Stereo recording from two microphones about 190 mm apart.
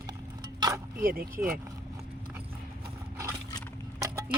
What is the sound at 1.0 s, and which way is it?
Speech, 50° right (ahead or behind).